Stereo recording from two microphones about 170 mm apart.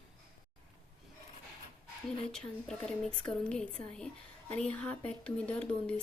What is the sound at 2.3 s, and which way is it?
Speech, 5° left (ahead or behind).